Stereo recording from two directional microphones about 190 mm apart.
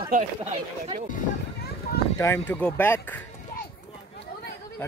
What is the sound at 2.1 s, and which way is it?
Speech, 15° left (ahead or behind).